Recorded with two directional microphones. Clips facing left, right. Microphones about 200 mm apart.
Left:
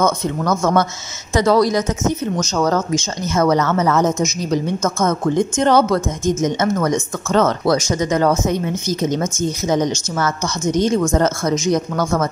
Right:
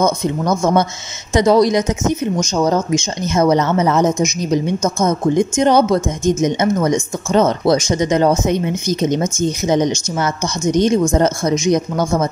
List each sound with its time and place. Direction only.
0.0 s speech: 15° right (ahead or behind)